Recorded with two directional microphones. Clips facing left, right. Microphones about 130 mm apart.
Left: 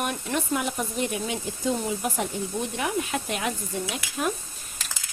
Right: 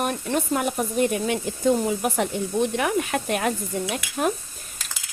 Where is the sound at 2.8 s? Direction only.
60° right (ahead or behind).